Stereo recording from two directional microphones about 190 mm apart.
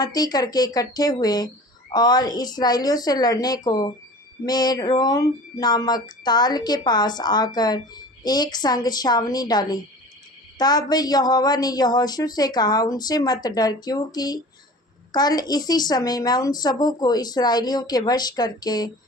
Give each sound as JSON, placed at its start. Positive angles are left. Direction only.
{"t": 0.0, "sound": "speech", "side_deg": 20}